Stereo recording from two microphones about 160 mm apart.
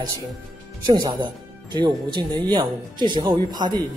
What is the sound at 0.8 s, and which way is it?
A man's voice, 25° right (ahead or behind).